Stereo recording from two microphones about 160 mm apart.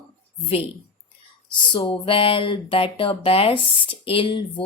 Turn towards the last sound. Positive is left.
turn(degrees=30)  # may be behind; listen again after turning